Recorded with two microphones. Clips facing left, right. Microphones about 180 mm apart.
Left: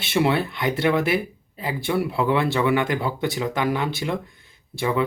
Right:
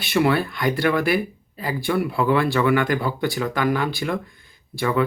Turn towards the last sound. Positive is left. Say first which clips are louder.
# right 1 dB
turn(degrees=15)  # may be behind; listen again after turning